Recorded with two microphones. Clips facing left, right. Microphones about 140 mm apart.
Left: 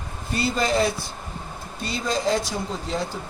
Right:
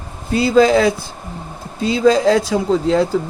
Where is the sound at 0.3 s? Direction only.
90° right.